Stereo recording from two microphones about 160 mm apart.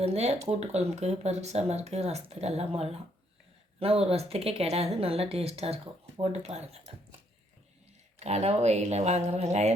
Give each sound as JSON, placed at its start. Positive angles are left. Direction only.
{"t": 0.0, "sound": "speech", "side_deg": -40}
{"t": 8.2, "sound": "speech", "side_deg": -45}